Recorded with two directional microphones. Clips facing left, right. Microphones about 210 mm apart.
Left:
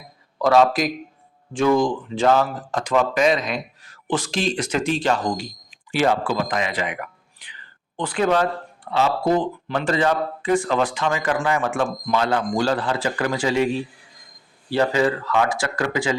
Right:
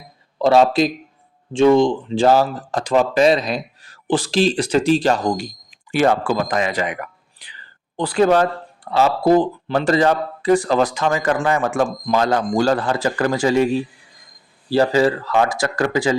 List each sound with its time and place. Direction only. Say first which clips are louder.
0.3 s speech: right 3 dB; 30° right (ahead or behind)
14.7 s speech: right 4 dB; 35° right (ahead or behind)